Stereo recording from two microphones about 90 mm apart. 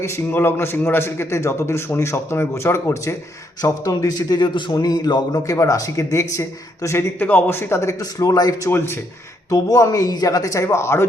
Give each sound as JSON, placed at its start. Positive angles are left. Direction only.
{"t": 0.0, "sound": "a man's voice", "side_deg": 30}
{"t": 3.6, "sound": "a man's voice", "side_deg": 45}
{"t": 6.8, "sound": "speech", "side_deg": 25}
{"t": 8.7, "sound": "a man's voice", "side_deg": 25}
{"t": 9.5, "sound": "speech", "side_deg": 40}